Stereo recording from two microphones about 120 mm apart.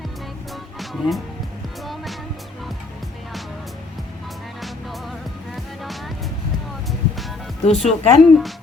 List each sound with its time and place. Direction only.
0.5 s music: centre (ahead or behind)
7.6 s speech: 60° left (ahead or behind)
7.9 s speech: centre (ahead or behind)